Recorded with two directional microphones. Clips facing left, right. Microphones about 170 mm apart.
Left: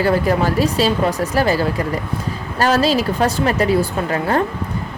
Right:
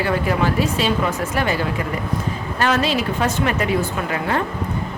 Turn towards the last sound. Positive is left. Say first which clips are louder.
# left 4 dB
turn(degrees=40)  # may be behind; listen again after turning